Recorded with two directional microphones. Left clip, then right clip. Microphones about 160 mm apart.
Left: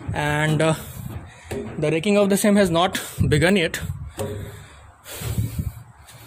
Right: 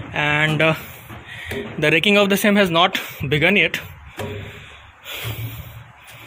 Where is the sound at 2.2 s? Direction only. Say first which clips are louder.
Right 2 dB; 15° left (ahead or behind).